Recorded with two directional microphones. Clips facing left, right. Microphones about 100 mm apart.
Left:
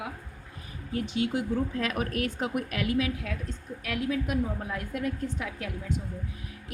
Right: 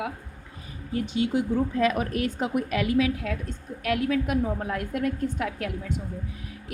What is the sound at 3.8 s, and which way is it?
A woman's voice, 65° right (ahead or behind).